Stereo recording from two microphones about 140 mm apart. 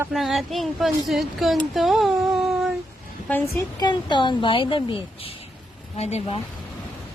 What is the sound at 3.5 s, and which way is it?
Speech, 30° left (ahead or behind).